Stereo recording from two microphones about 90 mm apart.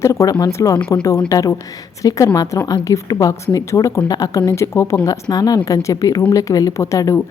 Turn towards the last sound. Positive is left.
turn(degrees=35)  # may be behind; listen again after turning